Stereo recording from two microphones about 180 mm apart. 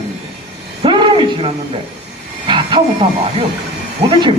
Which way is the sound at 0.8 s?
25° right (ahead or behind).